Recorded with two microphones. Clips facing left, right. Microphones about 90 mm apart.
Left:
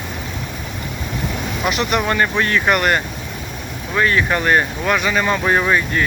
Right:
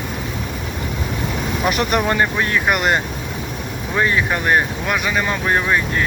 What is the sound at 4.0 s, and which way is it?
Speech, 15° right (ahead or behind).